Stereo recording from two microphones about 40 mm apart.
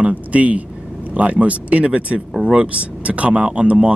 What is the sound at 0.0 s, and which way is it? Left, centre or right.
A man's voice, right.